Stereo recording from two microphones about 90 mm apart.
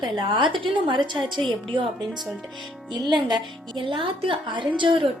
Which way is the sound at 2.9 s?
50° right (ahead or behind).